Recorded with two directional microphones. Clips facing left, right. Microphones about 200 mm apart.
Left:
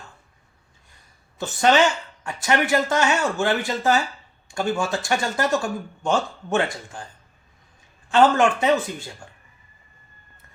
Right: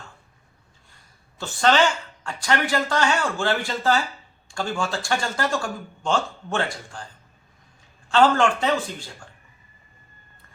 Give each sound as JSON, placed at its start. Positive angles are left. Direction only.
{"t": 1.4, "sound": "a woman's voice", "side_deg": 20}
{"t": 8.1, "sound": "speech", "side_deg": 20}